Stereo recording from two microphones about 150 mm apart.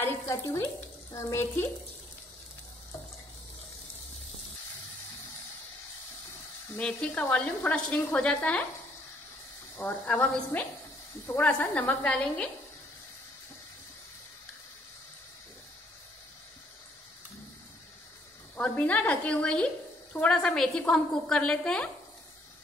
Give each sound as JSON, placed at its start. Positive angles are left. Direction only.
{"t": 0.0, "sound": "frying", "side_deg": 15}
{"t": 1.1, "sound": "a woman's voice", "side_deg": 20}
{"t": 6.7, "sound": "a woman's voice", "side_deg": 10}
{"t": 9.8, "sound": "a woman's voice", "side_deg": 10}
{"t": 18.6, "sound": "a woman's voice", "side_deg": 10}